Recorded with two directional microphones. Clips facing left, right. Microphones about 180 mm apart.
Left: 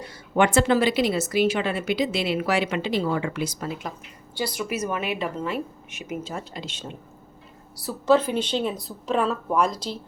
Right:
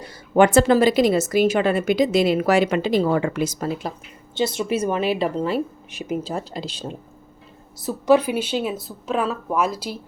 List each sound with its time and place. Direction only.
0.1 s a woman's voice: 40° right (ahead or behind)
4.4 s speech: 25° right (ahead or behind)
7.8 s speech: 15° right (ahead or behind)